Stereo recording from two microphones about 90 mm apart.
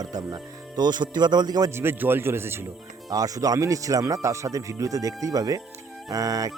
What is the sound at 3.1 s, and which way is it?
A man's voice, 40° right (ahead or behind).